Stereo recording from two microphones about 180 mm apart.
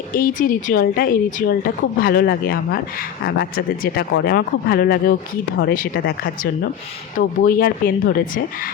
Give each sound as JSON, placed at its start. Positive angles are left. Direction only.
{"t": 0.1, "sound": "a woman's voice", "side_deg": 50}